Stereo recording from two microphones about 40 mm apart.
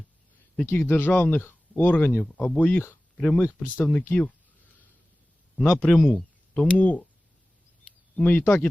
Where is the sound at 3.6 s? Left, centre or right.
Left.